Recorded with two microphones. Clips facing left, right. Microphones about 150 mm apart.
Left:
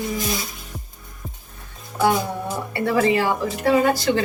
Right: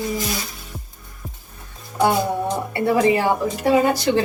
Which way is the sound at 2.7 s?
20° right (ahead or behind).